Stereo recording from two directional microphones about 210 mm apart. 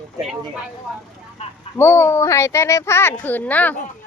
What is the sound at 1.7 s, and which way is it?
Speech, 10° left (ahead or behind).